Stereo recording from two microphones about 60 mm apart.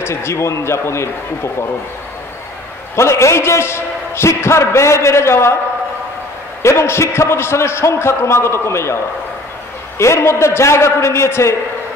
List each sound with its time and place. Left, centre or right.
0.0 s a man's voice: left
3.0 s a man's voice: left
6.6 s a man's voice: left